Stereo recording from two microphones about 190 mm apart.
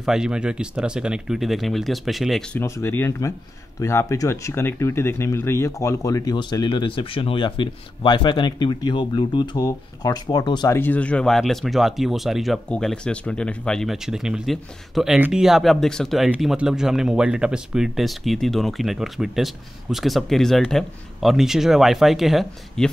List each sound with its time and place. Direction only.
0.0 s speech: 5° right (ahead or behind)
2.6 s speech: 15° left (ahead or behind)
10.8 s speech: 10° left (ahead or behind)